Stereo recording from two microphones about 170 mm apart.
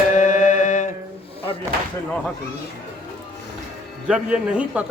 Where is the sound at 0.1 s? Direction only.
50° left (ahead or behind).